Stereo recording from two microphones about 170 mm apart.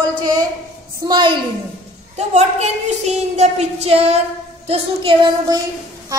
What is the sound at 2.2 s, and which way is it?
Child singing, 40° right (ahead or behind).